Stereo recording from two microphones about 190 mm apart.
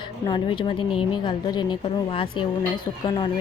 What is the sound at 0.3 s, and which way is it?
A woman's voice, 25° left (ahead or behind).